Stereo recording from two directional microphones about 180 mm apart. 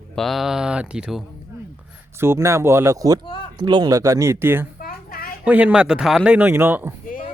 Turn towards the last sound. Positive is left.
turn(degrees=-10)  # may be behind; listen again after turning